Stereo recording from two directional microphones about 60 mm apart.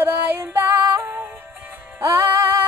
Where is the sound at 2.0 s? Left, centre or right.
Right.